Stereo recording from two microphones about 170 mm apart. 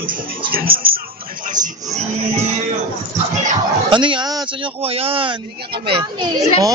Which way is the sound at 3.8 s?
30° right (ahead or behind).